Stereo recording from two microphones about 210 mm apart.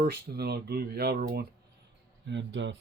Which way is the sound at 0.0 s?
50° right (ahead or behind).